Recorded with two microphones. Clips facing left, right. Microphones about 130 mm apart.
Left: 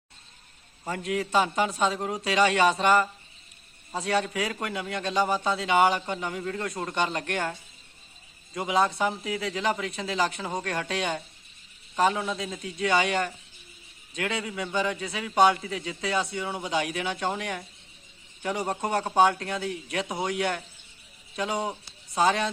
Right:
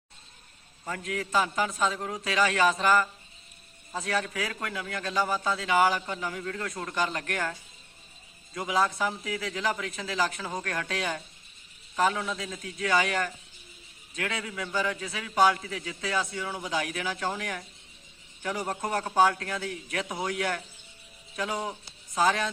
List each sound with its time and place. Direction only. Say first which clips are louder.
0.9 s a man's voice: left 4 dB; 25° left (ahead or behind)
8.5 s a man's voice: left 2 dB; 20° left (ahead or behind)